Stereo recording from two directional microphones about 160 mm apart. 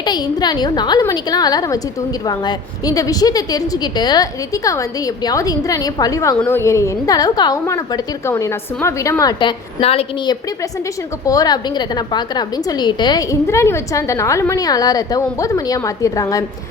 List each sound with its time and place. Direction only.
0.0 s a woman's voice: 25° left (ahead or behind)
11.3 s a woman's voice: 25° left (ahead or behind)